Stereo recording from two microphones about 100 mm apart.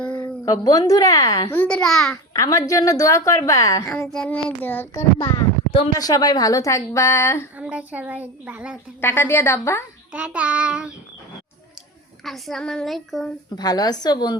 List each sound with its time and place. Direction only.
0.1 s speech: 40° left (ahead or behind)
1.6 s child singing: 5° left (ahead or behind)
2.3 s a woman's voice: 35° left (ahead or behind)
4.1 s child singing: 10° left (ahead or behind)
6.0 s a woman's voice: 40° left (ahead or behind)
7.6 s a woman's voice: 15° right (ahead or behind)
9.0 s a woman's voice: 25° left (ahead or behind)
10.1 s a woman's voice: 10° right (ahead or behind)
12.2 s child singing: 5° left (ahead or behind)
13.6 s a woman's voice: 40° left (ahead or behind)